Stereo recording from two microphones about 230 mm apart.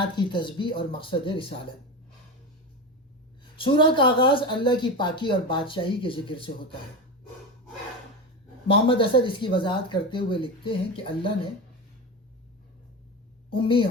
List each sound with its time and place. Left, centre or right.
0.0 s speech: centre
3.6 s speech: left
8.9 s speech: left
13.5 s speech: left